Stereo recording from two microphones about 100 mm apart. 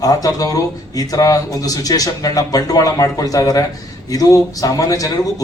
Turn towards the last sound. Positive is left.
turn(degrees=35)  # may be behind; listen again after turning